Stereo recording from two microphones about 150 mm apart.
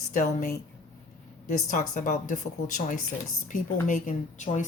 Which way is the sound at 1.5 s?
55° left (ahead or behind).